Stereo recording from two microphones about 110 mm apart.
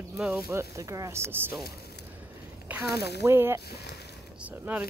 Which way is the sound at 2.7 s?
10° right (ahead or behind).